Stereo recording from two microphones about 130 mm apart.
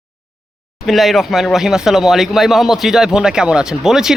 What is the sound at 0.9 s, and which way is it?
Speech, centre (ahead or behind).